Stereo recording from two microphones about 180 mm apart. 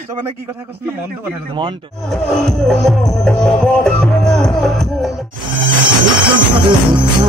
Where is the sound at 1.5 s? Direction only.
30° right (ahead or behind).